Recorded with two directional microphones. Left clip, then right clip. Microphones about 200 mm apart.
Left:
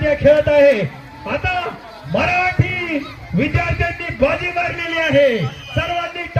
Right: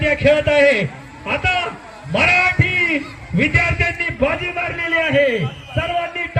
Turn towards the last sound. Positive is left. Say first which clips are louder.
# right 1 dB
turn(degrees=55)  # may be behind; listen again after turning